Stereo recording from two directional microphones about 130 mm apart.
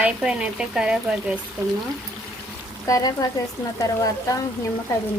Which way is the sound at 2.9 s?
25° left (ahead or behind).